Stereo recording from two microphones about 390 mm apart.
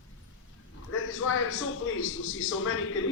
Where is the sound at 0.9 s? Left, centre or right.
Left.